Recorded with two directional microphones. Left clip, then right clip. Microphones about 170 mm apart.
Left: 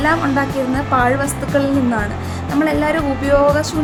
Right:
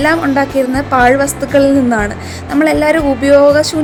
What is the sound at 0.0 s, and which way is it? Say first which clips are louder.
Speech: right 4 dB; 35° right (ahead or behind).